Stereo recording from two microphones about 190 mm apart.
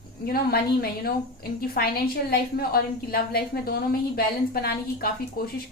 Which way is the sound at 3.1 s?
55° left (ahead or behind).